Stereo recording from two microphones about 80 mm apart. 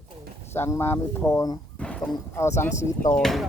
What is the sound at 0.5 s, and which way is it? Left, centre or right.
Speech, left.